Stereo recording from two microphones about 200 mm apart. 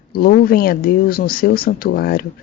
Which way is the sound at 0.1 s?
50° left (ahead or behind).